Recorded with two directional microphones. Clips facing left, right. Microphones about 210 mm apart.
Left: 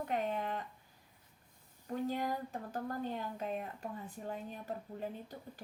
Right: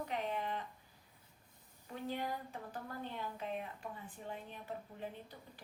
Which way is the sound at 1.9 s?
45° left (ahead or behind).